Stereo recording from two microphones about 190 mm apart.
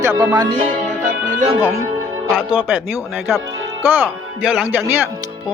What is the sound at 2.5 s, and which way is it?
Speech, 10° right (ahead or behind).